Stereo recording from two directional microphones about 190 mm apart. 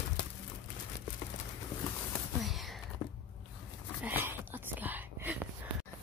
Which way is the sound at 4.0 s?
10° right (ahead or behind).